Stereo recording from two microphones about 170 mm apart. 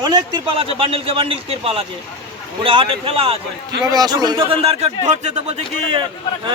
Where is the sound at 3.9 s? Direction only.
25° right (ahead or behind); by 6.0 s 40° right (ahead or behind).